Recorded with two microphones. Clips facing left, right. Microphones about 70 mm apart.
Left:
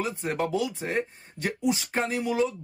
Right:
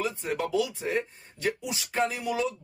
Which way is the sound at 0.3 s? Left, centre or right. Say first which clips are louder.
Even; left.